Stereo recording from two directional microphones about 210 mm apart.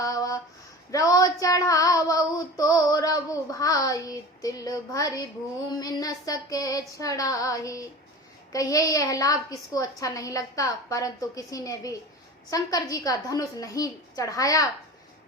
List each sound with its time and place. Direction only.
0.0 s a sound: 15° left (ahead or behind)
0.9 s female singing: 15° left (ahead or behind)
5.6 s a woman's voice: 15° left (ahead or behind)